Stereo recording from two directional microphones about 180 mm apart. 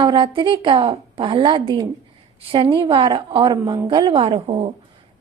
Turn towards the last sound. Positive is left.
turn(degrees=-35)  # may be behind; listen again after turning